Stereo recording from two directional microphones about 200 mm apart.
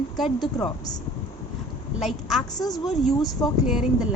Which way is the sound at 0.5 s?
20° left (ahead or behind).